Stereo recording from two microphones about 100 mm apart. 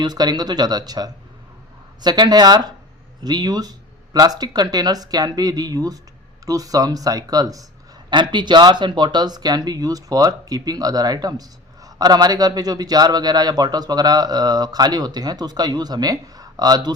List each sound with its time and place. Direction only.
0.0 s speech: 40° right (ahead or behind)
8.1 s speech: 50° right (ahead or behind)